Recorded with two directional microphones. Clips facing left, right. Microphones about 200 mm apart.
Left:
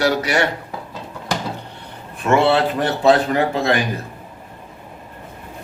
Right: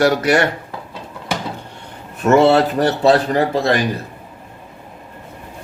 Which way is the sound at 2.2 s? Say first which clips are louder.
Right 4 dB; 40° right (ahead or behind).